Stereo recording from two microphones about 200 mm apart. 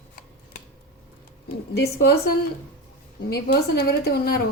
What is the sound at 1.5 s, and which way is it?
Speech, 55° left (ahead or behind).